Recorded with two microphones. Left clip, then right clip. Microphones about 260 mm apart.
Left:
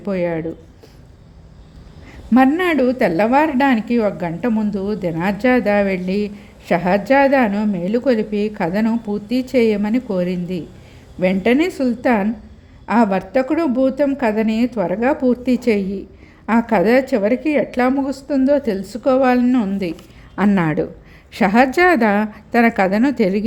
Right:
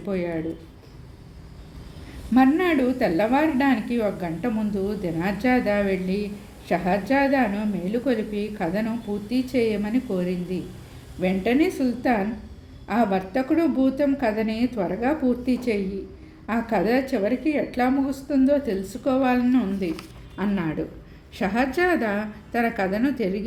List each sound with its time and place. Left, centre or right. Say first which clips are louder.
0.0 s a woman's voice: left 7 dB; left
2.3 s a woman's voice: left 5 dB; left